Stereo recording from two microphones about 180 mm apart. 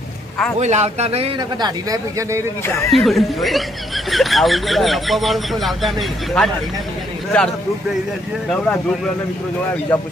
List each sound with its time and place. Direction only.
0.6 s a man's voice: 40° right (ahead or behind); by 2.4 s 20° right (ahead or behind)
2.6 s speech: 15° left (ahead or behind)
2.9 s speech: centre (ahead or behind)
9.9 s speech: 10° left (ahead or behind)